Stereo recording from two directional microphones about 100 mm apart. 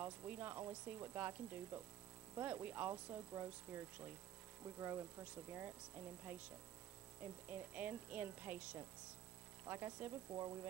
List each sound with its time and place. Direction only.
0.0 s speech: 20° right (ahead or behind)
4.6 s mains hum: 25° right (ahead or behind)
7.2 s speech: 15° right (ahead or behind)
10.3 s speech: 30° right (ahead or behind)